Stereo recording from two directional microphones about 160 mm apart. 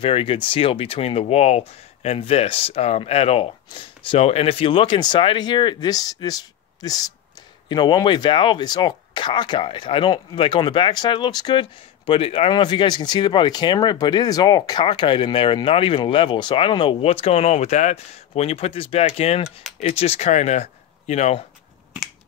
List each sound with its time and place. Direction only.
0.0 s speech: 35° left (ahead or behind)